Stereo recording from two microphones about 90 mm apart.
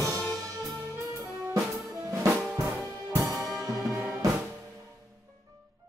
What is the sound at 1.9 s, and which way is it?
Drum kit, 35° right (ahead or behind).